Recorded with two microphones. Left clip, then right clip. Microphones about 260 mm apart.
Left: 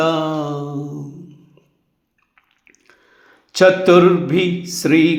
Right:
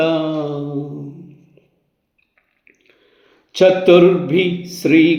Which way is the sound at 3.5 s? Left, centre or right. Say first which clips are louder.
Right 1 dB; left.